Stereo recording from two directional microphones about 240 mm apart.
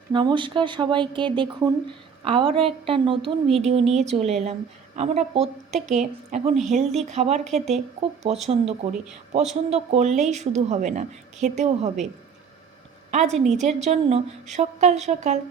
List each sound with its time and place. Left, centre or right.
0.1 s a woman's voice: centre
8.4 s a woman's voice: right
13.1 s a sound: right
13.4 s a woman's voice: right